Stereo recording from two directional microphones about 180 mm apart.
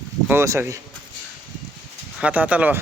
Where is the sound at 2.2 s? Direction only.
5° right (ahead or behind).